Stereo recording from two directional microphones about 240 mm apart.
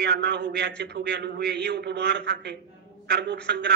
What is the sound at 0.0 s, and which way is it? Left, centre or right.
A man's voice, right.